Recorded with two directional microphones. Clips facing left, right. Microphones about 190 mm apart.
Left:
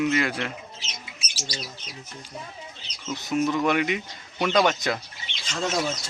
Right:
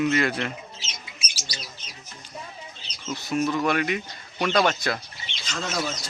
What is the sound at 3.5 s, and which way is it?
A man's voice, 15° left (ahead or behind).